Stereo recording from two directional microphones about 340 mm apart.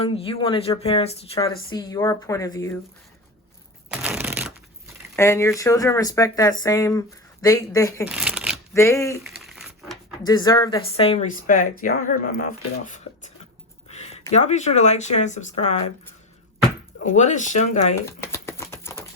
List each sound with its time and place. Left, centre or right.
0.0 s speech: centre
3.9 s shuffling cards: centre
5.1 s speech: centre
8.0 s shuffling cards: centre
8.7 s crumpling: centre
10.2 s speech: centre
13.8 s a sound: centre
14.3 s speech: centre
17.1 s speech: left
18.0 s a sound: centre